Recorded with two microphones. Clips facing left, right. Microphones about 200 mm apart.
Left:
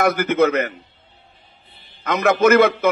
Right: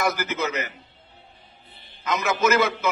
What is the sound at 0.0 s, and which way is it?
Speech, 55° left (ahead or behind).